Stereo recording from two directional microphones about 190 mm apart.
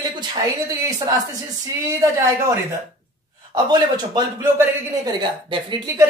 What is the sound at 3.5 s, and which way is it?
A man's voice, 20° right (ahead or behind).